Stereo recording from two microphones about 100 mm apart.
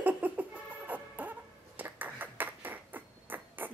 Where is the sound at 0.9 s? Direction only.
15° right (ahead or behind).